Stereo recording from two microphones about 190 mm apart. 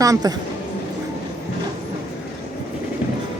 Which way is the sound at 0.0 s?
20° right (ahead or behind).